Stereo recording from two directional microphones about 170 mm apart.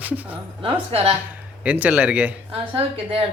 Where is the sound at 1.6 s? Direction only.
10° right (ahead or behind).